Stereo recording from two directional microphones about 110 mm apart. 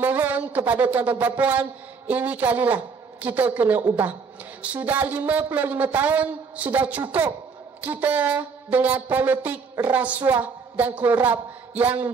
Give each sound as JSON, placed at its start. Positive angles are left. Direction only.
{"t": 0.0, "sound": "speech", "side_deg": -20}